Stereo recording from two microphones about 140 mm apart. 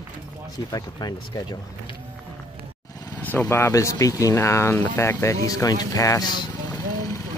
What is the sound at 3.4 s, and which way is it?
Speech, 20° left (ahead or behind).